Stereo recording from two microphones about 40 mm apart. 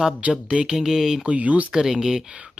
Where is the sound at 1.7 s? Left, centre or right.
Centre.